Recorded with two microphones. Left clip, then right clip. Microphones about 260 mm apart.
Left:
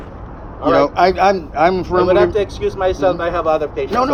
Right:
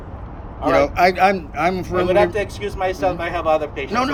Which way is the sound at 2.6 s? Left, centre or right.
Right.